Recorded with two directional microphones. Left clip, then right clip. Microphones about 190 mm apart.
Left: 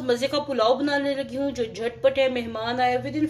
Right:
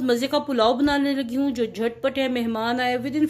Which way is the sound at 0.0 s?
45° right (ahead or behind).